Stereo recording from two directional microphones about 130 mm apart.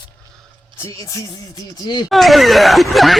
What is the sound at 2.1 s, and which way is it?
Speech, centre (ahead or behind).